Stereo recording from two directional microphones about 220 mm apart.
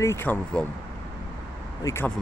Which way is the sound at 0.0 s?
10° left (ahead or behind).